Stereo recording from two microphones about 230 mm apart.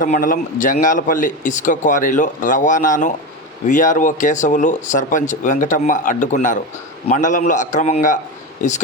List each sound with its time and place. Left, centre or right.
0.0 s speech: left